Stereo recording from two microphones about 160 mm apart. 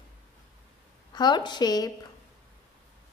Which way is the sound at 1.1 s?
25° left (ahead or behind).